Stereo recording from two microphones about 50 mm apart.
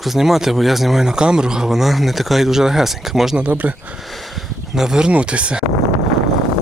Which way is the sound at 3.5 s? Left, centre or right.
Right.